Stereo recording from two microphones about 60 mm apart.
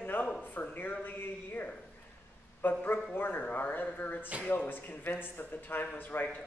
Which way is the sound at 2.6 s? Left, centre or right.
Left.